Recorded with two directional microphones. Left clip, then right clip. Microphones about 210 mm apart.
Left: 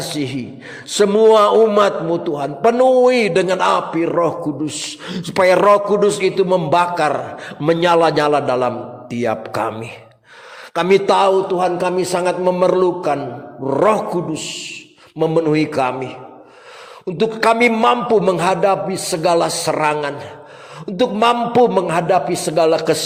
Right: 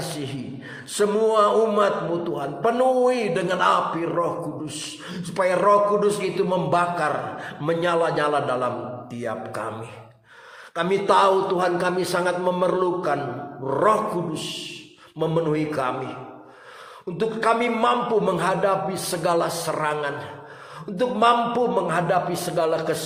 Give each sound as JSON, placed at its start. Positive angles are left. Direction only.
{"t": 0.0, "sound": "a sound", "side_deg": 35}
{"t": 0.9, "sound": "a man's voice", "side_deg": 35}
{"t": 10.8, "sound": "a man's voice", "side_deg": 35}
{"t": 17.2, "sound": "a man's voice", "side_deg": 40}